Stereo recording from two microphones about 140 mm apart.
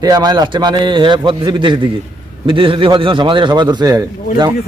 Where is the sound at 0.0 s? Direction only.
30° right (ahead or behind).